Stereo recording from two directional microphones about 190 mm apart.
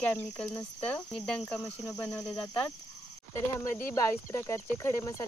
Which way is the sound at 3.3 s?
15° left (ahead or behind).